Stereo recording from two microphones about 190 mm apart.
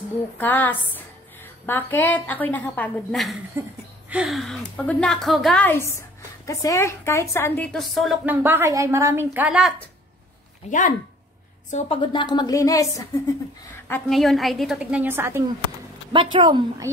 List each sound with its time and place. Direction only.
0.4 s a woman's voice: 10° left (ahead or behind)
3.6 s a woman's voice: 10° right (ahead or behind)
8.3 s a woman's voice: 10° right (ahead or behind)
10.7 s speech: 45° left (ahead or behind)
11.7 s a woman's voice: 30° left (ahead or behind)
13.8 s a woman's voice: 5° left (ahead or behind); by 15.4 s 15° right (ahead or behind)
16.1 s a woman's voice: 25° right (ahead or behind)